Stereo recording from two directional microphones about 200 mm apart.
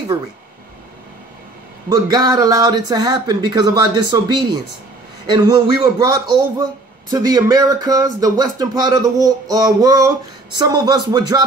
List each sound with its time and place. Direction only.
1.9 s a man's voice: 20° right (ahead or behind)